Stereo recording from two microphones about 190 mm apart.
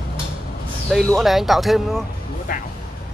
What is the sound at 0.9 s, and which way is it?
Speech, centre (ahead or behind).